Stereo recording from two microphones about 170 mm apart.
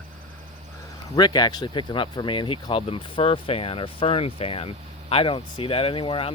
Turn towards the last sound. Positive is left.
turn(degrees=30)  # may be behind; listen again after turning